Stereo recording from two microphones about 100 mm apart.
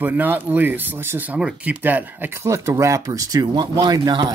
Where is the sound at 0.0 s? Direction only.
20° right (ahead or behind).